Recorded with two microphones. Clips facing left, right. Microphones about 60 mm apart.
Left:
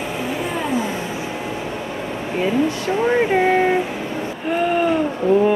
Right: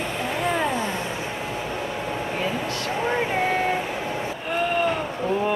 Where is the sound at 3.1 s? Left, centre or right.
Centre.